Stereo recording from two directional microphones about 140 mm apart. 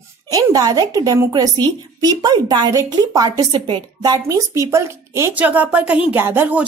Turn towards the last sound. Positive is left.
turn(degrees=-15)  # may be behind; listen again after turning